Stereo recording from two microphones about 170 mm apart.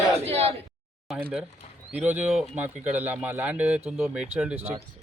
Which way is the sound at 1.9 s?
10° right (ahead or behind).